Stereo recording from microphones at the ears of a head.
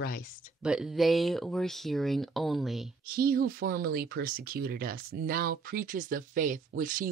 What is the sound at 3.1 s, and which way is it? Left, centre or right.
Speech, right.